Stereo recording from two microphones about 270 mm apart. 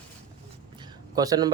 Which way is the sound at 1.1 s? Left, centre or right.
Centre.